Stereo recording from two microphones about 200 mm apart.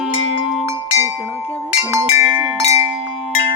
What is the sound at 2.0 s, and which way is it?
Speech, centre (ahead or behind).